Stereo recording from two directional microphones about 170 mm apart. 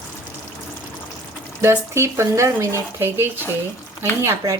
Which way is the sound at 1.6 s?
15° right (ahead or behind).